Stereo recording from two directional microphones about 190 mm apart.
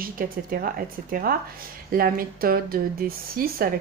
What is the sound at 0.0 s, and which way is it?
A woman's voice, 50° right (ahead or behind).